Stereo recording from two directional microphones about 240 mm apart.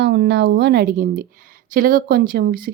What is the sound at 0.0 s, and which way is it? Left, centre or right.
A woman's voice, right.